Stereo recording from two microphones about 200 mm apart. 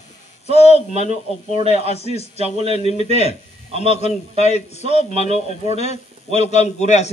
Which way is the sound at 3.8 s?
35° left (ahead or behind).